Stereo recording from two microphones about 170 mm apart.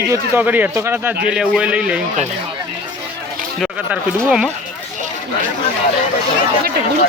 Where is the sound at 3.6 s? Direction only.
5° right (ahead or behind).